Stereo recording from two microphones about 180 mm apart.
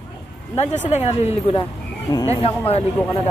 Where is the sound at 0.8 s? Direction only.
35° left (ahead or behind).